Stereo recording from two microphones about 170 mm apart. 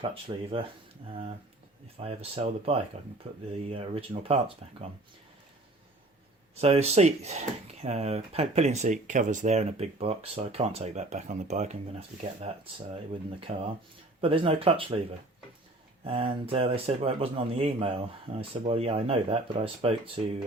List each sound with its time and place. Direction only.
0.0 s speech: 30° right (ahead or behind)
2.0 s speech: 35° right (ahead or behind)
6.6 s speech: 35° right (ahead or behind)
13.5 s speech: 35° right (ahead or behind)
16.0 s speech: 35° right (ahead or behind)